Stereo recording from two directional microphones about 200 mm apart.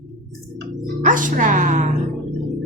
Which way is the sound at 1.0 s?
40° right (ahead or behind).